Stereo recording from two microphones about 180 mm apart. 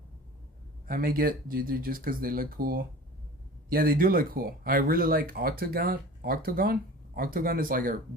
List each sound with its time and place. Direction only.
0.9 s speech: 50° right (ahead or behind)